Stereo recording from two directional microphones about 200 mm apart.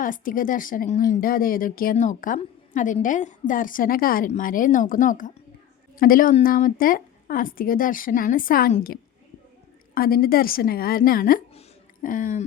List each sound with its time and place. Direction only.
0.0 s speech: 45° left (ahead or behind)